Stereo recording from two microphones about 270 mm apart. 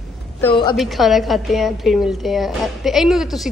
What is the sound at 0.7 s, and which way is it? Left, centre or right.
A woman's voice, centre.